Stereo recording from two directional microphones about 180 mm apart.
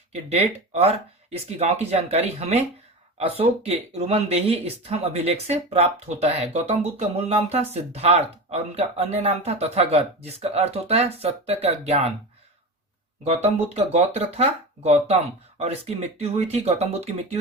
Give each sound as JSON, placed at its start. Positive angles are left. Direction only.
{"t": 0.1, "sound": "speech", "side_deg": -35}
{"t": 13.2, "sound": "speech", "side_deg": -35}